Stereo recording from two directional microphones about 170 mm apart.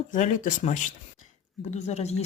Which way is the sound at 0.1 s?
50° left (ahead or behind).